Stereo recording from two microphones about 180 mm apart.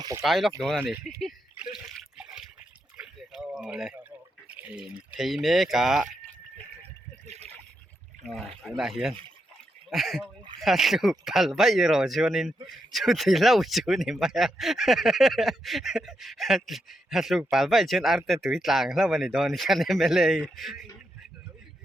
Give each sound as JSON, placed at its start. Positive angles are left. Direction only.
{"t": 0.2, "sound": "speech", "side_deg": 0}
{"t": 1.2, "sound": "a sound", "side_deg": -5}
{"t": 1.9, "sound": "water", "side_deg": -5}
{"t": 3.0, "sound": "a sound", "side_deg": -5}
{"t": 5.1, "sound": "speech", "side_deg": 0}
{"t": 7.3, "sound": "trickle", "side_deg": -40}
{"t": 8.4, "sound": "speech", "side_deg": 0}